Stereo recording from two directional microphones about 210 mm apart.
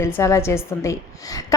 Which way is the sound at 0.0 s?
10° left (ahead or behind).